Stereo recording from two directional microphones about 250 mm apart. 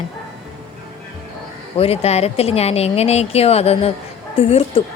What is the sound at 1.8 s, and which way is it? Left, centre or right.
Speech, left.